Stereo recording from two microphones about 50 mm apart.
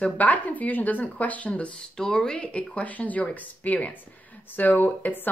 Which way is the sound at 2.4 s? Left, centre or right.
Left.